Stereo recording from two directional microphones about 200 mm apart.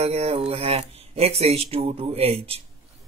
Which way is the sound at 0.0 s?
30° right (ahead or behind).